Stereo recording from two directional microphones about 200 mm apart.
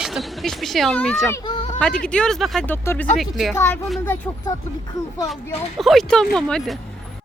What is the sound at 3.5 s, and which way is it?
Speech, 10° left (ahead or behind).